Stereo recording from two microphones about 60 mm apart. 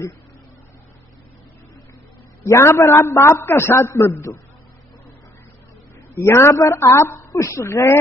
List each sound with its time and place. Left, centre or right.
2.4 s a woman's voice: left
6.1 s a woman's voice: left